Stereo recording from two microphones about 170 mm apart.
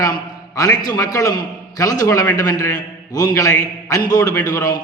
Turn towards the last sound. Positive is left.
turn(degrees=20)  # may be behind; listen again after turning